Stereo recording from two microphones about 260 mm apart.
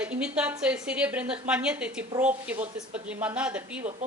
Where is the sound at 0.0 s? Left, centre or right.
Centre.